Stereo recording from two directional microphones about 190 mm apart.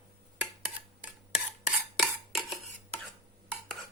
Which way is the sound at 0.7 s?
5° right (ahead or behind).